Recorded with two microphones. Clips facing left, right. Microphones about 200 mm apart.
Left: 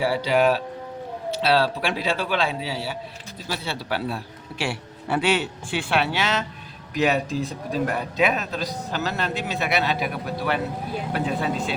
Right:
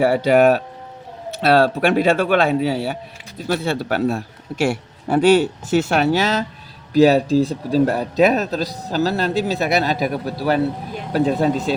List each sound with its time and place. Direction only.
0.0 s a man's voice: 50° right (ahead or behind)